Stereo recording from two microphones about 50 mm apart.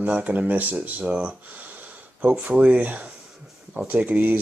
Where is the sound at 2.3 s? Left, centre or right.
Right.